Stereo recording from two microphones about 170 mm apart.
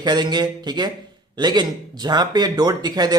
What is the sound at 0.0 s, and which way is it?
Speech, 25° right (ahead or behind).